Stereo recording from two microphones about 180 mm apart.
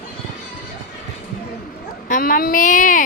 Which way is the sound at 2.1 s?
50° left (ahead or behind).